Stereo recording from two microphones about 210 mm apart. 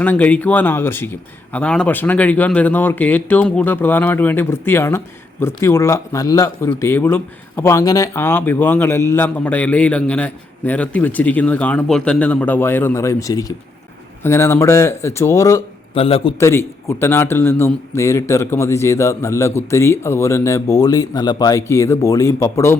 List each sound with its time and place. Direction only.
0.0 s speech: 10° left (ahead or behind)
16.0 s a man's voice: 25° left (ahead or behind)
16.4 s speech: 10° left (ahead or behind)